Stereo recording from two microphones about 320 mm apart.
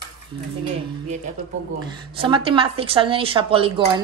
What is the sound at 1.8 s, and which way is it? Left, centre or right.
A woman's voice, centre.